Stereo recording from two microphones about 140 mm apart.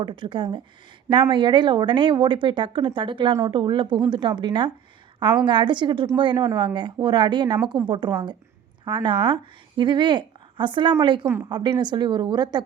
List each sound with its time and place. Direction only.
0.0 s speech: 35° right (ahead or behind)